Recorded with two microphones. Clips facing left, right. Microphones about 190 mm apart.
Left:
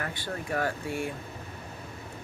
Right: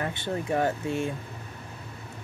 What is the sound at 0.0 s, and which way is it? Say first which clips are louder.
Speech: right 5 dB; 25° right (ahead or behind).